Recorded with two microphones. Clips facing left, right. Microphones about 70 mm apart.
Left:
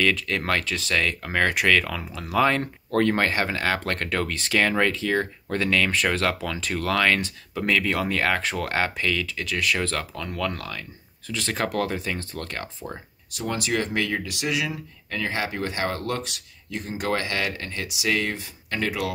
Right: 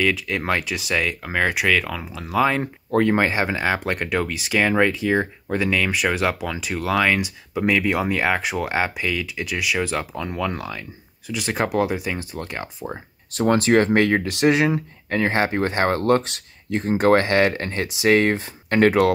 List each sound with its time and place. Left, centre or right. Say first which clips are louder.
0.0 s speech: right 2 dB; centre
13.3 s speech: right 10 dB; right